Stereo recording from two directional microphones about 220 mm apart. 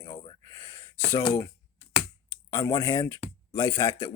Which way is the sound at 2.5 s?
15° left (ahead or behind).